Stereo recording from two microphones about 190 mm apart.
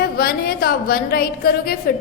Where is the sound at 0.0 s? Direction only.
50° left (ahead or behind).